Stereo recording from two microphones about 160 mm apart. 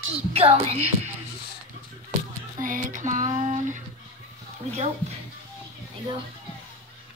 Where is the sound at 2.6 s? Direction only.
55° right (ahead or behind).